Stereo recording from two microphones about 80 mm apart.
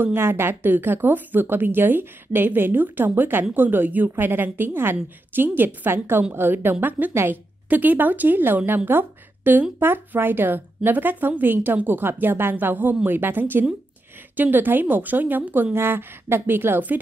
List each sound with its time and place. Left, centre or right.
0.0 s a woman's voice: right